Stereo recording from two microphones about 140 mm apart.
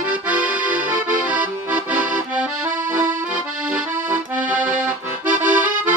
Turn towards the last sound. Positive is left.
turn(degrees=-70)  # may be behind; listen again after turning